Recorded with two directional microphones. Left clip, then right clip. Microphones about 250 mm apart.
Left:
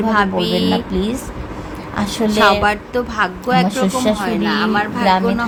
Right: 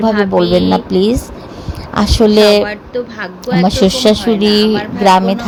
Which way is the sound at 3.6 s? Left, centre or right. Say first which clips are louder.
Right 7 dB; right.